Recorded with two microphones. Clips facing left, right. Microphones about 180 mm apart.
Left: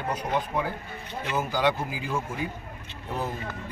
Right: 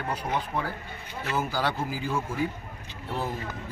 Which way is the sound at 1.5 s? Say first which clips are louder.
Left 3 dB; 15° left (ahead or behind).